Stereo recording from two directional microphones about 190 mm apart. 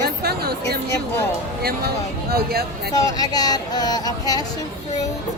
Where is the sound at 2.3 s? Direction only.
55° right (ahead or behind).